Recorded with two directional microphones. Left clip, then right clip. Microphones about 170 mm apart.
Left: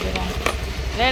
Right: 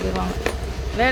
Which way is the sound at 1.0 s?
45° right (ahead or behind).